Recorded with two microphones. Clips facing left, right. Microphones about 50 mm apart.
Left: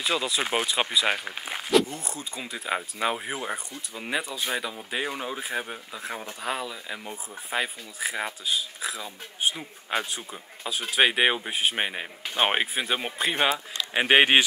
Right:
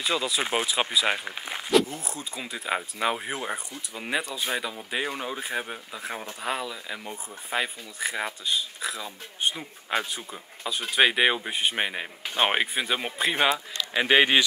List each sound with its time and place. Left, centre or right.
0.0 s speech: centre
13.7 s speech: left